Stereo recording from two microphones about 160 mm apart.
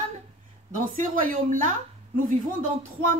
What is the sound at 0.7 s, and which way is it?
A woman's voice, 60° right (ahead or behind).